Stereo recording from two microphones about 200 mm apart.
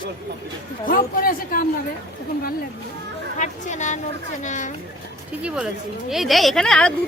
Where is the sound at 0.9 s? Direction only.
45° left (ahead or behind).